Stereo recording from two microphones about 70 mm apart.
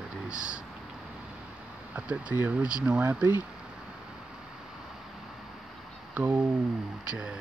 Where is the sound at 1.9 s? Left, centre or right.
Right.